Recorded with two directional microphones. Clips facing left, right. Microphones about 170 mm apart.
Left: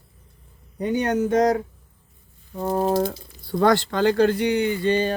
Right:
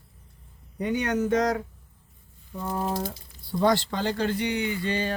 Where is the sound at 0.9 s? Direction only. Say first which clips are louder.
Left 3 dB; 45° left (ahead or behind).